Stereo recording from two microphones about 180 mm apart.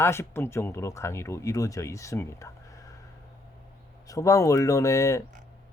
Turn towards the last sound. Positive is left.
turn(degrees=15)  # may be behind; listen again after turning